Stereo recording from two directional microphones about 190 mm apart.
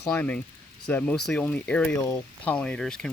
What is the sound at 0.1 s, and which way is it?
Speech, 5° left (ahead or behind).